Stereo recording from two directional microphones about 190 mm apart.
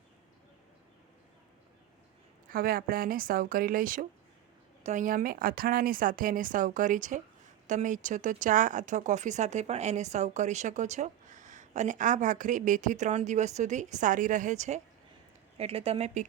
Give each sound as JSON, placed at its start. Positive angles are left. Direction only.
{"t": 2.5, "sound": "speech", "side_deg": -50}